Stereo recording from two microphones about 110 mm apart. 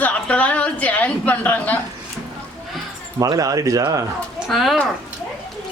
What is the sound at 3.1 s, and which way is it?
Speech, 35° right (ahead or behind).